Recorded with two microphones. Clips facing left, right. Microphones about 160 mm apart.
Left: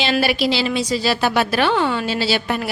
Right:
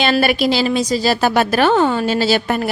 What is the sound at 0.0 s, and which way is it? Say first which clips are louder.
A woman's voice: right 3 dB; 50° right (ahead or behind).